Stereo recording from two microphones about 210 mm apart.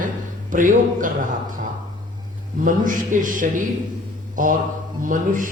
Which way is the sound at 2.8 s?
40° right (ahead or behind).